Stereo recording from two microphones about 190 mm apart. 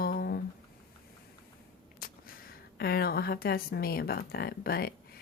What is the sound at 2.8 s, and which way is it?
Speech, 55° left (ahead or behind).